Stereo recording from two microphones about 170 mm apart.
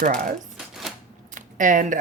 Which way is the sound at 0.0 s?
50° right (ahead or behind).